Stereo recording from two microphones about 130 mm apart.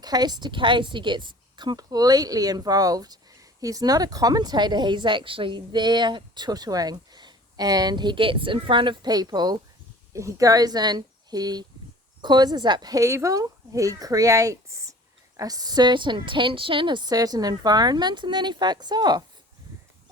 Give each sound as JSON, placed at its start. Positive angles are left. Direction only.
{"t": 0.0, "sound": "a woman's voice", "side_deg": -30}